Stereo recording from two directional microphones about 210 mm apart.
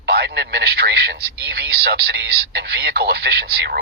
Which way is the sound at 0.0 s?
50° right (ahead or behind).